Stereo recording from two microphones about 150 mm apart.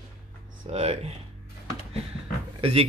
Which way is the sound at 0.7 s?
40° right (ahead or behind).